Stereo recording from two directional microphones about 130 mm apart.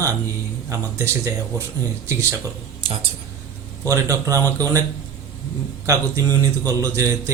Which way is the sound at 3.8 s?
25° right (ahead or behind).